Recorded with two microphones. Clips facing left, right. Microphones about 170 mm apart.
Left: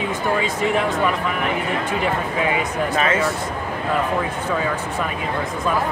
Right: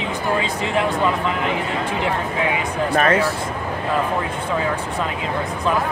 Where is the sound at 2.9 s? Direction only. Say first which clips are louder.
Right 4 dB; 55° right (ahead or behind).